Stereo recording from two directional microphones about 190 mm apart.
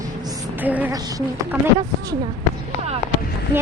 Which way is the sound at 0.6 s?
10° right (ahead or behind).